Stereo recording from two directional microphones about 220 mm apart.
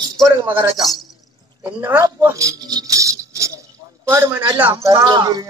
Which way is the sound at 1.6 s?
10° right (ahead or behind).